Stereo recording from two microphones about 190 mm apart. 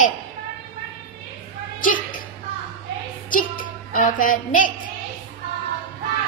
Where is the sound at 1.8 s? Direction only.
45° left (ahead or behind).